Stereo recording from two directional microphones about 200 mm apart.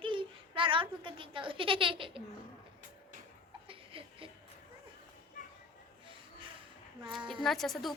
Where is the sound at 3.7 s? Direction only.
25° right (ahead or behind).